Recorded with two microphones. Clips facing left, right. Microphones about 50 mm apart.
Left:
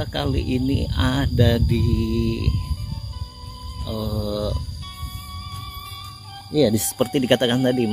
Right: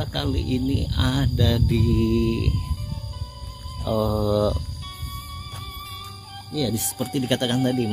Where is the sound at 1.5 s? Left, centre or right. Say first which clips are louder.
Left 1 dB; centre.